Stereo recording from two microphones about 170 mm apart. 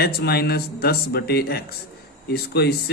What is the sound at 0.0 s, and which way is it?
Speech, 70° left (ahead or behind).